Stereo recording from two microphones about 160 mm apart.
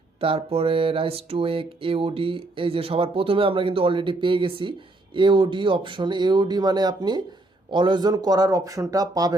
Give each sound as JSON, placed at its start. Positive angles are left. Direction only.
{"t": 0.2, "sound": "speech", "side_deg": -35}